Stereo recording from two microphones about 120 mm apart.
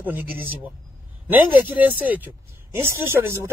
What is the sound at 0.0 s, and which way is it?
Speech, 15° right (ahead or behind).